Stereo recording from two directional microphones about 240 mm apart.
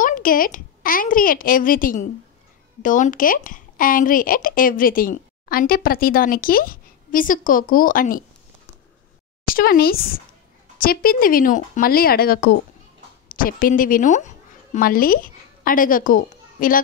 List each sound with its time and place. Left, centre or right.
0.0 s a woman's voice: left
9.5 s a woman's voice: left